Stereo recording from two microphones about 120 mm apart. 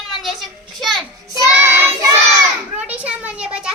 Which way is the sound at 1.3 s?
25° right (ahead or behind).